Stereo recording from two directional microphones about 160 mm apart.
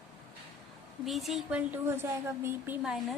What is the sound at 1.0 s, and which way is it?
A woman's voice, centre (ahead or behind).